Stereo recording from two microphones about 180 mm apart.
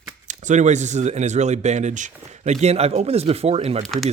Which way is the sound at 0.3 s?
40° right (ahead or behind).